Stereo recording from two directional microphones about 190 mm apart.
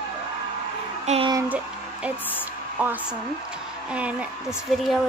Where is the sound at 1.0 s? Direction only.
35° right (ahead or behind).